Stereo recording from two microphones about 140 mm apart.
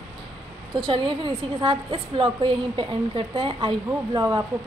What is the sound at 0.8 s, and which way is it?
A woman's voice, 35° right (ahead or behind).